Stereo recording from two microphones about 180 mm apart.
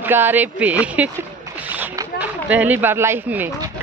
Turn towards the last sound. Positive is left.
turn(degrees=-10)  # may be behind; listen again after turning